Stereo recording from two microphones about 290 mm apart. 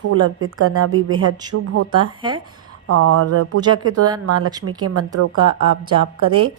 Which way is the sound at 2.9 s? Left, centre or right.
Right.